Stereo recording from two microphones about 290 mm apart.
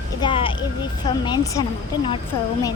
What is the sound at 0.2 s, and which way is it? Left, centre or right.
A woman's voice, centre.